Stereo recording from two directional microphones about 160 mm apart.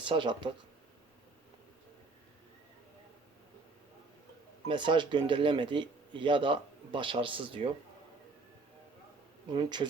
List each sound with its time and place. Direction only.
0.0 s a man's voice: 30° right (ahead or behind)
4.7 s a man's voice: 30° right (ahead or behind)
9.5 s speech: 30° right (ahead or behind)